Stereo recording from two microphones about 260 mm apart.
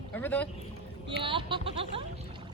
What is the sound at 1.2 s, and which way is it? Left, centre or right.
Speech, centre.